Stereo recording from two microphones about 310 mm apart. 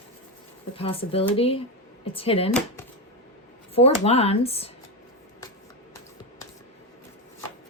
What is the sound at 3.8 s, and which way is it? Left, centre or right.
Speech, centre.